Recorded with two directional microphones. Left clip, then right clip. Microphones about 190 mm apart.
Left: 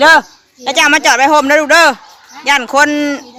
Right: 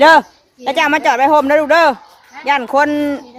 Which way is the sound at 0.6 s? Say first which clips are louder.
Left 4 dB; 15° right (ahead or behind).